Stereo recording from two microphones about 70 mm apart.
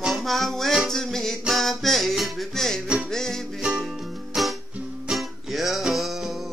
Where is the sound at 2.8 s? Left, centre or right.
Centre.